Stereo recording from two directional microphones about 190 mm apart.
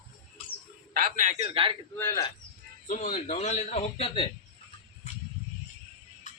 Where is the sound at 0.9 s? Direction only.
45° right (ahead or behind).